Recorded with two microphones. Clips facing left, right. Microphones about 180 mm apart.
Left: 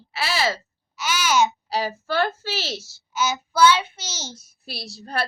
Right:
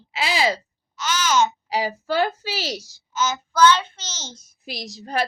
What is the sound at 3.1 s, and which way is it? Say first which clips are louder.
A child's voice: even; 10° left (ahead or behind).